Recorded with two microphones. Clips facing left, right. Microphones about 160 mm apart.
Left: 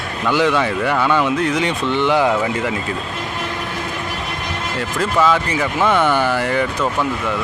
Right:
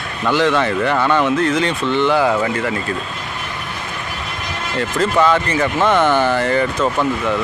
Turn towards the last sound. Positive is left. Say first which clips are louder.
# right 2 dB
turn(degrees=5)  # may be behind; listen again after turning